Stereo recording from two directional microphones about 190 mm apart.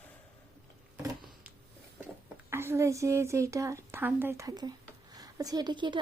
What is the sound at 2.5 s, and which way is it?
A woman's voice, 10° right (ahead or behind).